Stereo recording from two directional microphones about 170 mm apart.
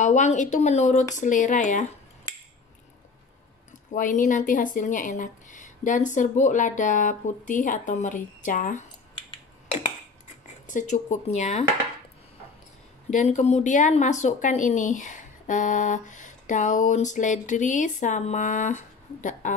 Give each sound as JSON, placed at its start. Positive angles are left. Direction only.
{"t": 0.0, "sound": "a woman's voice", "side_deg": 45}
{"t": 3.9, "sound": "a woman's voice", "side_deg": 50}
{"t": 10.7, "sound": "a woman's voice", "side_deg": 45}
{"t": 13.1, "sound": "a woman's voice", "side_deg": 45}